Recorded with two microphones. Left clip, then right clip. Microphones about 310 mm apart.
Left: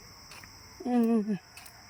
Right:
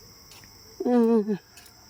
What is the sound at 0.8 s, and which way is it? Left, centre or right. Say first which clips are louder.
Speech: right 7 dB; centre.